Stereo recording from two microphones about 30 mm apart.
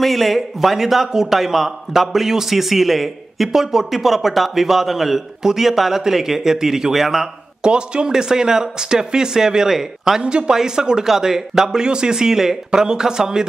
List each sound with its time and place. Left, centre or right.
0.0 s a man's voice: centre
7.6 s speech: right; by 10.2 s centre
10.2 s speech: right
10.5 s speech: right